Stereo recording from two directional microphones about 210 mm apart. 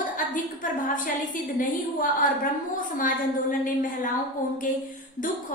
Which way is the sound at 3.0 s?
40° left (ahead or behind).